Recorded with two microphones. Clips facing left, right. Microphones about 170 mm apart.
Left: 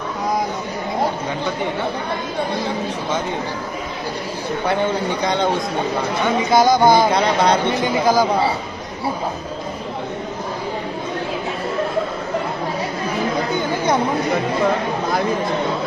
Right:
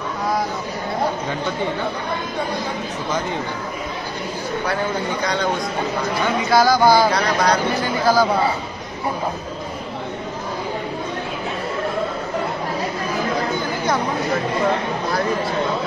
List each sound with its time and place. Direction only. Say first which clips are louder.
5.2 s speech: left 3 dB; 20° left (ahead or behind)
6.5 s speech: left 1 dB; 20° left (ahead or behind)